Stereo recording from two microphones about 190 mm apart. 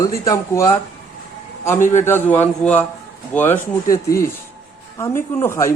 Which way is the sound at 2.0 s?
10° left (ahead or behind).